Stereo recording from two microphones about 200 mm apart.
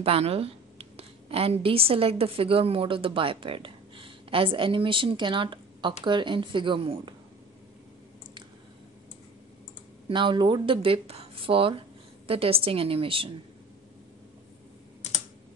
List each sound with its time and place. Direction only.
0.0 s a woman's voice: 30° right (ahead or behind)
10.0 s speech: 25° right (ahead or behind)
15.0 s computer keyboard: 35° left (ahead or behind)